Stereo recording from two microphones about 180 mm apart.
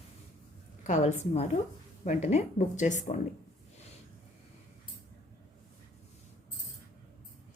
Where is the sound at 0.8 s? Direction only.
40° left (ahead or behind).